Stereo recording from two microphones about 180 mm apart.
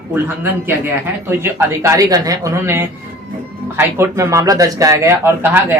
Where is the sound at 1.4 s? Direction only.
15° right (ahead or behind).